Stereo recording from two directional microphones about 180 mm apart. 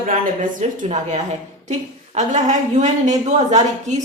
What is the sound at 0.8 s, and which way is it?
Speech, 40° right (ahead or behind).